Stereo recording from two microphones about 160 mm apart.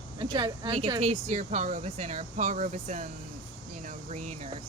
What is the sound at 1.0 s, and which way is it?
Speech, 45° right (ahead or behind).